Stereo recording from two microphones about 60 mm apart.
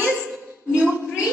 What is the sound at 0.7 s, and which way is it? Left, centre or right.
Speech, centre.